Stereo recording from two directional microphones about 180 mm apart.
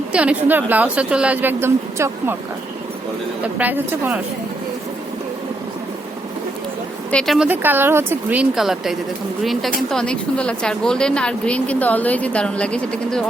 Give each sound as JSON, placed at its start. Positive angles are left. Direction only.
{"t": 0.1, "sound": "a woman's voice", "side_deg": -5}
{"t": 3.4, "sound": "a woman's voice", "side_deg": -10}
{"t": 7.1, "sound": "a woman's voice", "side_deg": 5}